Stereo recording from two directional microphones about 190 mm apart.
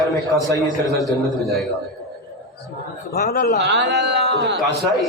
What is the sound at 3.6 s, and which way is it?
A man's voice, 65° right (ahead or behind).